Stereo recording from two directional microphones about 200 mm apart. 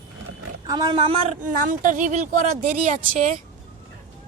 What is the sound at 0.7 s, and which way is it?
Speech, 20° right (ahead or behind).